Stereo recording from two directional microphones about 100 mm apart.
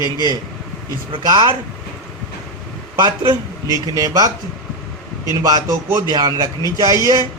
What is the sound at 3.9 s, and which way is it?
Speech, 40° right (ahead or behind).